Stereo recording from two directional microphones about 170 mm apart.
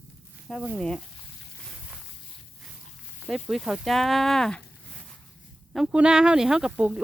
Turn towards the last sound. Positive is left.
turn(degrees=-5)  # may be behind; listen again after turning